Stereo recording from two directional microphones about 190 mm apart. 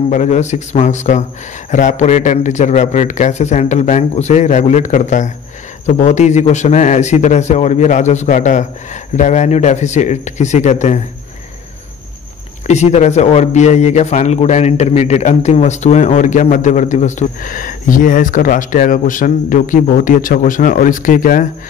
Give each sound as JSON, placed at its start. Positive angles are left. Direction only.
{"t": 0.1, "sound": "a man's voice", "side_deg": 40}
{"t": 12.6, "sound": "a man's voice", "side_deg": 35}